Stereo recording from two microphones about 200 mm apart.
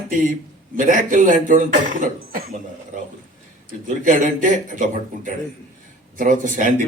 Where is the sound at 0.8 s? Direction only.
40° right (ahead or behind).